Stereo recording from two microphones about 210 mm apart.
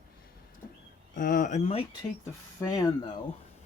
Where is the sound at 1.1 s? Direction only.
40° left (ahead or behind).